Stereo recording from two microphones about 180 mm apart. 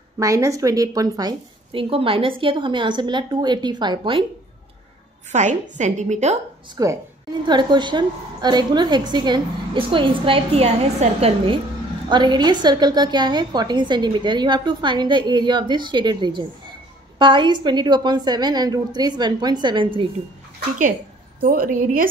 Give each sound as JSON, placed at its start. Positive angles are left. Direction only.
{"t": 0.2, "sound": "a woman's voice", "side_deg": -20}
{"t": 5.3, "sound": "a woman's voice", "side_deg": -40}
{"t": 6.8, "sound": "a woman's voice", "side_deg": -20}
{"t": 21.4, "sound": "a woman's voice", "side_deg": -55}